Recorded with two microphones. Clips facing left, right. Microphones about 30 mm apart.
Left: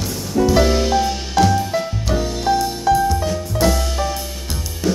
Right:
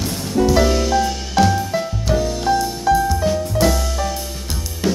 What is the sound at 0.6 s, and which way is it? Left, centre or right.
Music, centre.